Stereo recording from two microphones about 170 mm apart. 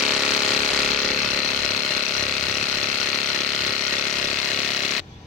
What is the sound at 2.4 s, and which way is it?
Engine, centre (ahead or behind).